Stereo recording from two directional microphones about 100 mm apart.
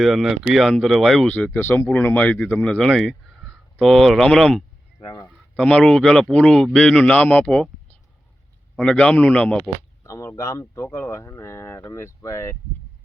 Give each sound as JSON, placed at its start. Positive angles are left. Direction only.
{"t": 0.0, "sound": "speech", "side_deg": 0}
{"t": 1.5, "sound": "speech", "side_deg": 25}
{"t": 8.7, "sound": "speech", "side_deg": 5}
{"t": 10.0, "sound": "speech", "side_deg": 30}